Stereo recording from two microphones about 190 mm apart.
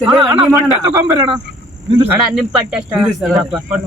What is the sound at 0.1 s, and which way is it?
A man's voice, 25° right (ahead or behind).